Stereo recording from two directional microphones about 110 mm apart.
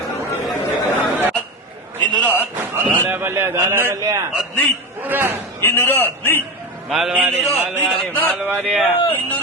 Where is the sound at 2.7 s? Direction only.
20° right (ahead or behind).